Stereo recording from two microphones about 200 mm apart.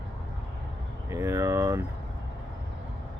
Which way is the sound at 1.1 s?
15° right (ahead or behind).